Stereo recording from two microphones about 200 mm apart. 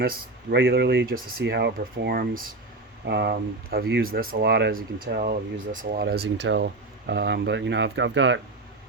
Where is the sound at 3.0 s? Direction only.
55° right (ahead or behind).